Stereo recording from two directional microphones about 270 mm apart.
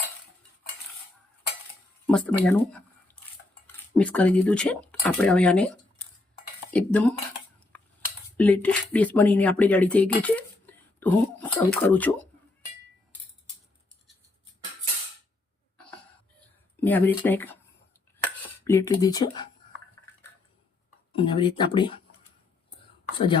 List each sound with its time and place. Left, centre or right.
2.0 s speech: centre
7.7 s a sound: centre
8.4 s speech: centre
16.8 s speech: centre
21.2 s speech: centre
23.1 s speech: centre